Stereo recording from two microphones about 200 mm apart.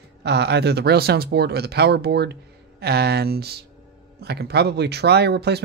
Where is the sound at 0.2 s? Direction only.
55° right (ahead or behind).